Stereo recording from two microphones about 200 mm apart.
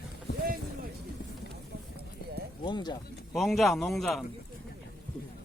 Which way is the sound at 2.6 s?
20° left (ahead or behind).